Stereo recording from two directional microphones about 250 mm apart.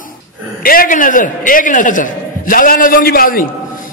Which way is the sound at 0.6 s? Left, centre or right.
Left.